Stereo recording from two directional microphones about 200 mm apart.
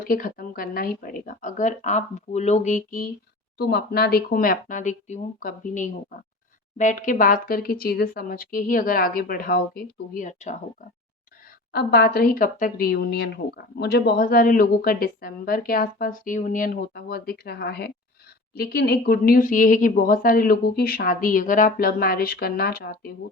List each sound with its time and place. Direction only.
0.0 s speech: 45° left (ahead or behind)
3.6 s speech: 50° left (ahead or behind)
11.7 s speech: 55° left (ahead or behind)